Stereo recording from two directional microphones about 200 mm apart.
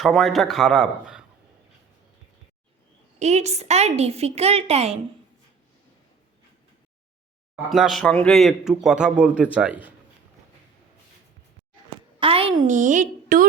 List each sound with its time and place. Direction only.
0.0 s speech: centre (ahead or behind)
3.2 s a woman's voice: 35° right (ahead or behind)
7.5 s speech: centre (ahead or behind)
12.2 s a woman's voice: 30° right (ahead or behind)